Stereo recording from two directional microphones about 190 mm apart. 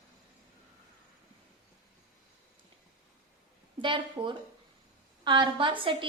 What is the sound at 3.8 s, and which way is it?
A woman's voice, 25° right (ahead or behind).